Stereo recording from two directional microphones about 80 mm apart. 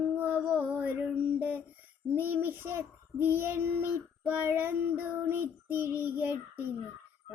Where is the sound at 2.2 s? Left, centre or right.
Right.